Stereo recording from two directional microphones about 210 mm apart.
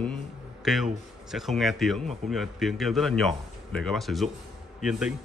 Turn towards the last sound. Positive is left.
turn(degrees=0)  # may be behind; listen again after turning